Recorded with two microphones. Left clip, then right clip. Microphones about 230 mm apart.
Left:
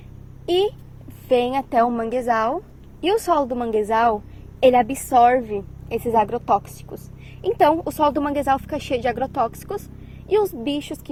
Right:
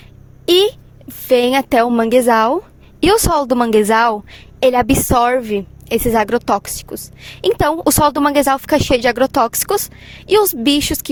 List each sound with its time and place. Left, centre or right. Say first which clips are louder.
0.4 s a woman's voice: right 8 dB; right